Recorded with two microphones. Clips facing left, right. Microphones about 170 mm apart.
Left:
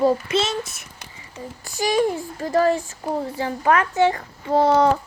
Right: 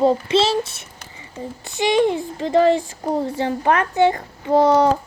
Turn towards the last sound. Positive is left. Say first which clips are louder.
# right 2 dB
turn(degrees=-35)  # may be behind; listen again after turning